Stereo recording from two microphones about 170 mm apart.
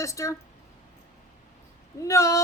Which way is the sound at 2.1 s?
20° left (ahead or behind).